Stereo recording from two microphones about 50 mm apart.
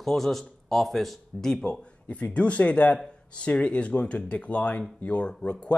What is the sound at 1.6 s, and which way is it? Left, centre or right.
Speech, left.